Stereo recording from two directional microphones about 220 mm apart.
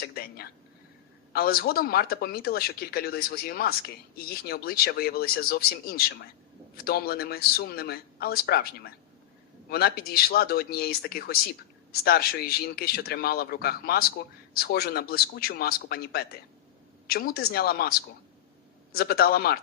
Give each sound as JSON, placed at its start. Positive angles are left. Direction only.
{"t": 0.0, "sound": "speech", "side_deg": 45}